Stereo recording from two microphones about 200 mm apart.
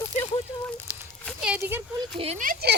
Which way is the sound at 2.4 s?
55° right (ahead or behind).